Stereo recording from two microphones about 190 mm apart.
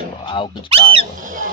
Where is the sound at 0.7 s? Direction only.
30° right (ahead or behind).